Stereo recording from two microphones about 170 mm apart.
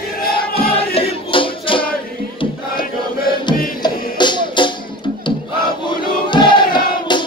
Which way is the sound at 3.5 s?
25° left (ahead or behind).